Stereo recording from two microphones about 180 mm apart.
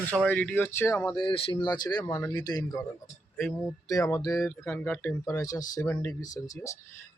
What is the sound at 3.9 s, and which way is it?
Speech, 20° left (ahead or behind).